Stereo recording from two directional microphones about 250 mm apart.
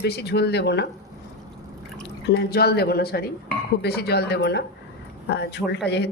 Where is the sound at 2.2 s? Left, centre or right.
Left.